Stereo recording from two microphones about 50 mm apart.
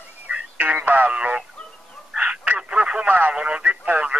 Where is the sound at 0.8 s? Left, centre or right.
Right.